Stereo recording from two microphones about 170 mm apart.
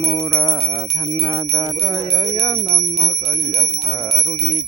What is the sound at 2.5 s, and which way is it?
Speech, centre (ahead or behind).